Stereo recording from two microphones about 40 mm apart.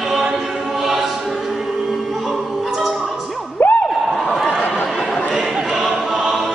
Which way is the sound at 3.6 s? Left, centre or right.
Left.